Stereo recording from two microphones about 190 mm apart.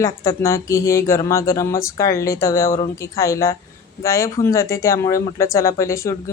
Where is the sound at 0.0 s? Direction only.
15° left (ahead or behind).